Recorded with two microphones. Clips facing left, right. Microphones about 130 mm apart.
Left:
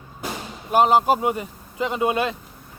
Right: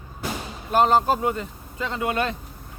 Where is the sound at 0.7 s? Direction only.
10° left (ahead or behind).